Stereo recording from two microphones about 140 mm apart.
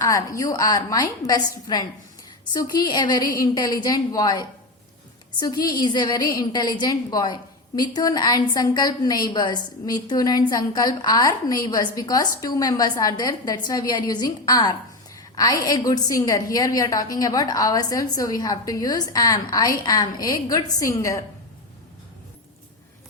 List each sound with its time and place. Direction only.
0.0 s a woman's voice: 25° left (ahead or behind)